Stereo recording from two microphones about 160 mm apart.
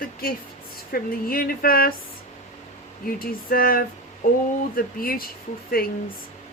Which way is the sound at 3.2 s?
65° left (ahead or behind).